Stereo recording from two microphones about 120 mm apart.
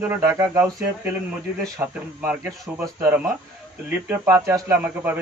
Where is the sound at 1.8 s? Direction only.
15° right (ahead or behind).